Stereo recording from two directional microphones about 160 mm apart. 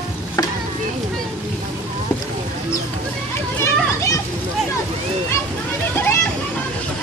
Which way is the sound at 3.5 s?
20° left (ahead or behind).